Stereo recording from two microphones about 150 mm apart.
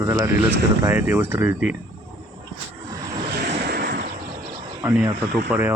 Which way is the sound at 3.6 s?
90° right.